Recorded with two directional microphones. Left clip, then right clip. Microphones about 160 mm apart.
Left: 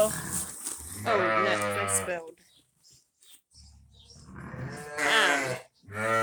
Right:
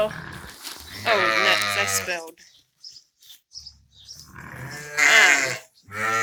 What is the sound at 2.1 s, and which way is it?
Speech, 5° right (ahead or behind).